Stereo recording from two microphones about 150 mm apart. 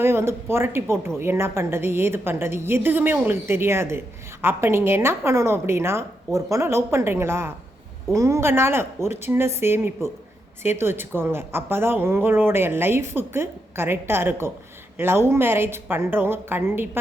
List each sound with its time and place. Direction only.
0.0 s a woman's voice: 15° right (ahead or behind)